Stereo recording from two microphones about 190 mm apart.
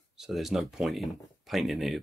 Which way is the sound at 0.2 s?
Centre (ahead or behind).